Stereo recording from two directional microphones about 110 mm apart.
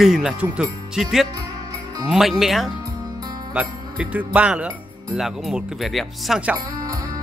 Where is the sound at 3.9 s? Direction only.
15° right (ahead or behind).